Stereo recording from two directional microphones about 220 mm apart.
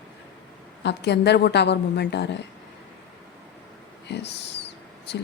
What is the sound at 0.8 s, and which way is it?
A woman's voice, 50° left (ahead or behind).